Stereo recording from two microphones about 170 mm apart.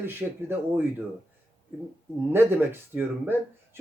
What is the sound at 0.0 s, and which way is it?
Speech, 15° right (ahead or behind).